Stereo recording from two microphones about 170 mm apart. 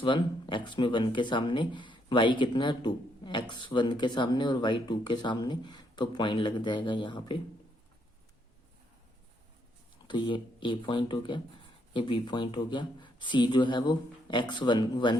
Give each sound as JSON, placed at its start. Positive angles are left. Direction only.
{"t": 0.0, "sound": "speech", "side_deg": 30}
{"t": 10.1, "sound": "speech", "side_deg": 30}